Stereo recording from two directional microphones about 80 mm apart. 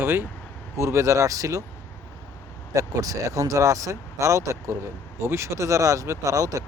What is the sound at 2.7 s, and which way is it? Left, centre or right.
Speech, right.